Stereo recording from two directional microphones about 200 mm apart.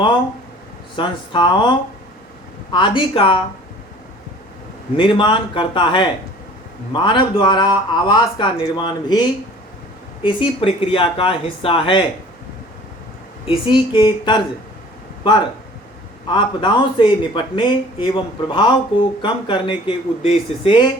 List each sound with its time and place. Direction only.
0.9 s speech: 25° left (ahead or behind)
2.7 s speech: 25° left (ahead or behind)
4.9 s speech: 25° left (ahead or behind)
10.2 s speech: 25° left (ahead or behind)
13.5 s speech: 25° left (ahead or behind)